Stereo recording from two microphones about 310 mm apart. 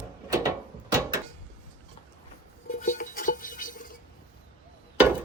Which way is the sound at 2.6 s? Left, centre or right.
Left.